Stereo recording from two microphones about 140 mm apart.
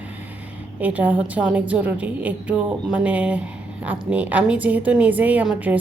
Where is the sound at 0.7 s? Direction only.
10° right (ahead or behind).